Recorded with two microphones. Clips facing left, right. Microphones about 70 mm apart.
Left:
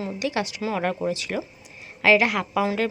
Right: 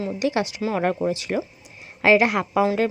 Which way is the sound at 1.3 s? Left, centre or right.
Centre.